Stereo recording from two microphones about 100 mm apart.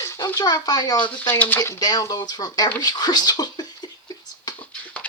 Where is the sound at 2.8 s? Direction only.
40° left (ahead or behind).